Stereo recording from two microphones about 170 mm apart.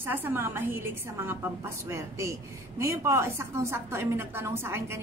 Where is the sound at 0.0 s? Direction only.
10° right (ahead or behind).